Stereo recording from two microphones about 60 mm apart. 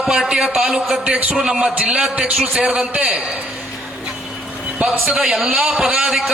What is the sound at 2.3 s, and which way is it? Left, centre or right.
Speech, centre.